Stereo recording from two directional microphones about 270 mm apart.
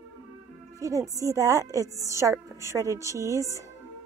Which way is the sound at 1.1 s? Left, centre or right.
Centre.